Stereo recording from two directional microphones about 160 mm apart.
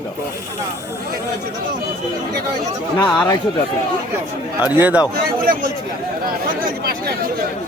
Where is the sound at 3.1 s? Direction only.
25° left (ahead or behind).